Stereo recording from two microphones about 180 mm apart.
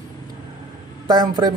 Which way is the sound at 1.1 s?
25° right (ahead or behind).